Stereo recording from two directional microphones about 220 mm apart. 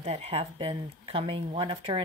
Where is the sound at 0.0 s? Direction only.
30° right (ahead or behind).